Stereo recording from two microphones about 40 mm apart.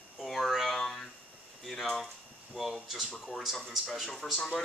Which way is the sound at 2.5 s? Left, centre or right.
Centre.